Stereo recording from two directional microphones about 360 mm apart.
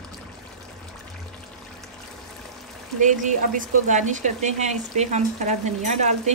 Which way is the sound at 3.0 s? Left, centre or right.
Right.